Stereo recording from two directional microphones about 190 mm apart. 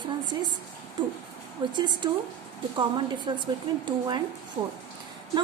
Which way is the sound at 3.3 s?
25° right (ahead or behind).